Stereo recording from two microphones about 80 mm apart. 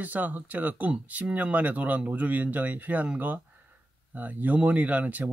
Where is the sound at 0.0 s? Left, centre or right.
Right.